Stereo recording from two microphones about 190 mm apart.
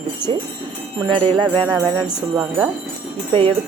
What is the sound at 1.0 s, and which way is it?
Jingle bell, 25° right (ahead or behind).